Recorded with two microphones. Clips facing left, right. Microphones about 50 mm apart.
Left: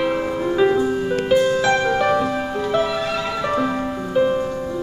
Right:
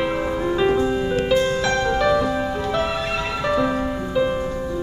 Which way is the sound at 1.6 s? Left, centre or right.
Centre.